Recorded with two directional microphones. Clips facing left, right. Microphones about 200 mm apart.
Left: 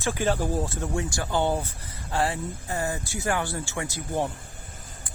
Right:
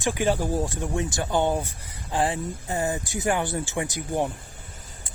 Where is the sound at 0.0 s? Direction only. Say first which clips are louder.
Right 2 dB; 15° right (ahead or behind).